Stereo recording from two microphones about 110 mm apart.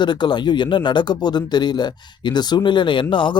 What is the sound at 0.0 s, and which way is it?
Speech, 45° left (ahead or behind).